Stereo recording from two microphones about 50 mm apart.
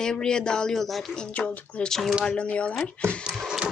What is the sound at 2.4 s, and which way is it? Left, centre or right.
Speech, left.